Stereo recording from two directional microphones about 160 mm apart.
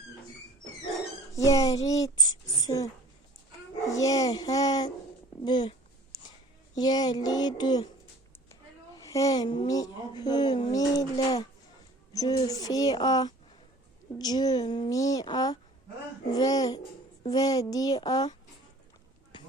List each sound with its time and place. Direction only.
1.3 s speech: 20° left (ahead or behind)
5.5 s a sound: 30° left (ahead or behind)
6.7 s speech: 25° left (ahead or behind)
9.0 s speech: 20° left (ahead or behind)